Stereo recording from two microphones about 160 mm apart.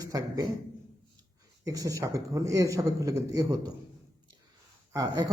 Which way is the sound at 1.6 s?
20° right (ahead or behind).